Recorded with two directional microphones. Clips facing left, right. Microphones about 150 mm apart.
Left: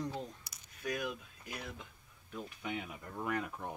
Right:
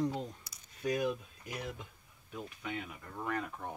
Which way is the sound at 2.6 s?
10° left (ahead or behind).